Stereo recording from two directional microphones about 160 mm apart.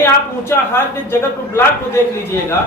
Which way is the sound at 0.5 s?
15° left (ahead or behind).